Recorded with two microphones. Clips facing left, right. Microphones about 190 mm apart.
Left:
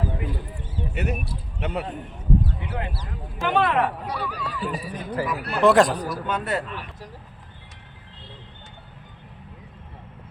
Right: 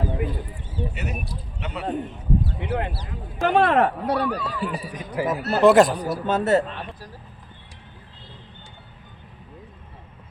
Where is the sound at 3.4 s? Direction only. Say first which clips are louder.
Right 3 dB; 45° right (ahead or behind).